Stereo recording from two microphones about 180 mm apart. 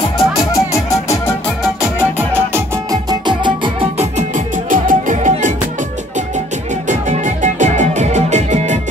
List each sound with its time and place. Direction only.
0.4 s music: 20° left (ahead or behind)
1.6 s music: 5° right (ahead or behind); by 5.5 s 45° right (ahead or behind)
6.9 s music: 40° right (ahead or behind)